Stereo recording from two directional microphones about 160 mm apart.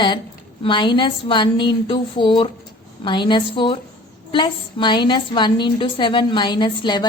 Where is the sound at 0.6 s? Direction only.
30° left (ahead or behind).